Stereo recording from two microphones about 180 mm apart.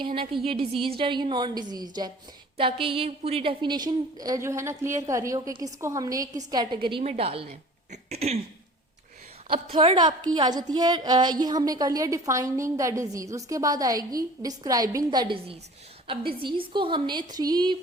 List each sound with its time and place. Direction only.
0.0 s a woman's voice: 30° right (ahead or behind)
9.5 s a woman's voice: 30° right (ahead or behind)